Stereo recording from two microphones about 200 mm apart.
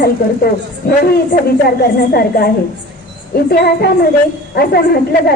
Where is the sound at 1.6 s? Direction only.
50° left (ahead or behind).